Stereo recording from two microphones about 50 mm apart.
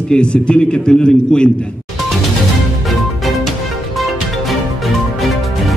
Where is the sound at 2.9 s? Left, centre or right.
Centre.